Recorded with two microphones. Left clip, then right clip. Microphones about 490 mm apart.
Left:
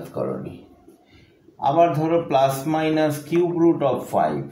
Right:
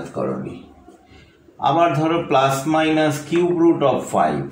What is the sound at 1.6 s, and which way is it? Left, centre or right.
A man's voice, left.